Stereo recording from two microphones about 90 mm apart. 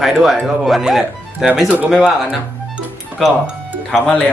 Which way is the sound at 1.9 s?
5° left (ahead or behind).